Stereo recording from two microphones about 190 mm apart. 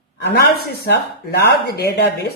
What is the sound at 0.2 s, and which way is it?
Speech, 60° left (ahead or behind).